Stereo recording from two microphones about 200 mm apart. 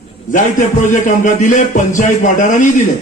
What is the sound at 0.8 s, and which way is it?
A man's voice, 40° left (ahead or behind).